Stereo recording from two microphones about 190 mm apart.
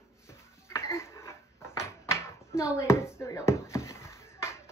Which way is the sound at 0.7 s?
15° left (ahead or behind).